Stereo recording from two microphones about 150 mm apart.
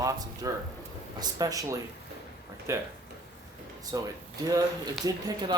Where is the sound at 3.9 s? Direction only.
25° right (ahead or behind).